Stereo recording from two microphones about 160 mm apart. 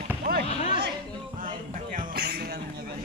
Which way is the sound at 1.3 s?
55° right (ahead or behind).